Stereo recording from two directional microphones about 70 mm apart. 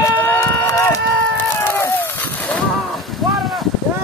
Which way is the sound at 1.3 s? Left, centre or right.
Left.